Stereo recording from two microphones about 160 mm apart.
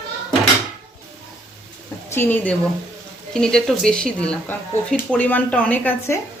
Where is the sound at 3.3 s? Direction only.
5° left (ahead or behind).